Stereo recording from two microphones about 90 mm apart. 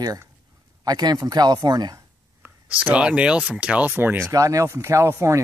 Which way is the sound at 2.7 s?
15° right (ahead or behind).